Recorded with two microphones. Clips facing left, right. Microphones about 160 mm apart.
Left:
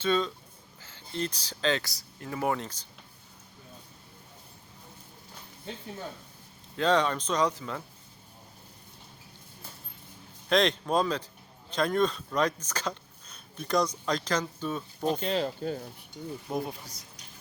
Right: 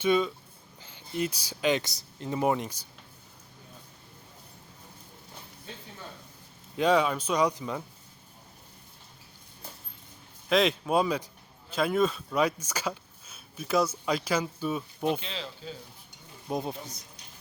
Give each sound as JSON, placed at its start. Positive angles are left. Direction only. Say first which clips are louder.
{"t": 0.0, "sound": "speech", "louder": "right 2 dB", "side_deg": -10}
{"t": 6.7, "sound": "speech", "louder": "right 1 dB", "side_deg": -10}
{"t": 10.5, "sound": "speech", "louder": "right 1 dB", "side_deg": -5}
{"t": 15.2, "sound": "speech", "louder": "left 10 dB", "side_deg": 50}
{"t": 16.5, "sound": "speech", "louder": "right 3 dB", "side_deg": -20}